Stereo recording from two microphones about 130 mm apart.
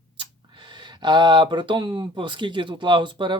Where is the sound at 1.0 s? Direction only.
35° right (ahead or behind).